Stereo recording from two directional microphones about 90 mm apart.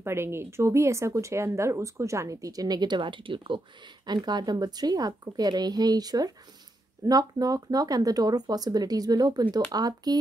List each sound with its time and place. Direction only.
0.0 s speech: 30° right (ahead or behind); by 10.1 s 45° right (ahead or behind)